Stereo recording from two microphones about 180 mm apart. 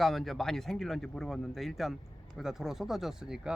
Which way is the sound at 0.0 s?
Centre (ahead or behind).